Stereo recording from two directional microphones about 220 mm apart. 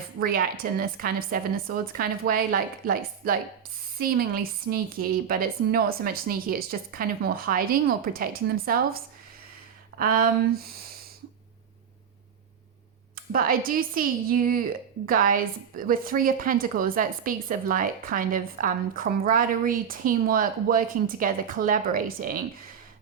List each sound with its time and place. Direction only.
0.2 s a woman's voice: 40° right (ahead or behind)
10.0 s a woman's voice: 40° right (ahead or behind)
13.3 s a woman's voice: 40° right (ahead or behind)